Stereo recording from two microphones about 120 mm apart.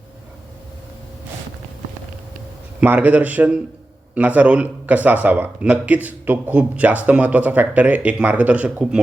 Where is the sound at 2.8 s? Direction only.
15° right (ahead or behind).